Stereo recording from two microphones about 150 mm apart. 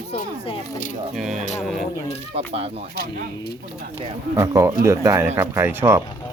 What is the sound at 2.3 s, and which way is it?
Speech, 45° right (ahead or behind).